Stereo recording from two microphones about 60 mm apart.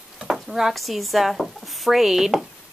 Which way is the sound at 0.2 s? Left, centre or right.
Centre.